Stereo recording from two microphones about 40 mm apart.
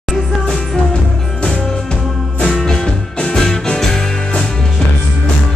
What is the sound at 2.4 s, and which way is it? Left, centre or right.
Music, centre.